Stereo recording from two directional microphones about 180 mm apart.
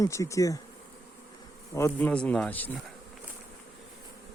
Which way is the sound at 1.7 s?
10° left (ahead or behind).